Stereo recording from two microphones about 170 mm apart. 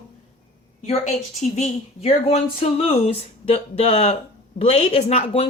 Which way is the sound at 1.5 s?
35° left (ahead or behind).